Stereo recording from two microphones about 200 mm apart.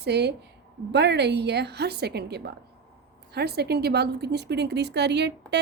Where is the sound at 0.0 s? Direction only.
55° right (ahead or behind).